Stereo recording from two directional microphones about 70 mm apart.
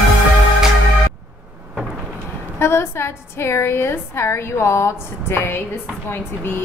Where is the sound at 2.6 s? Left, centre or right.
Left.